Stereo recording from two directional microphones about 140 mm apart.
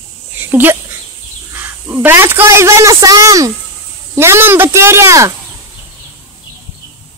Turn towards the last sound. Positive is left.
turn(degrees=-20)  # may be behind; listen again after turning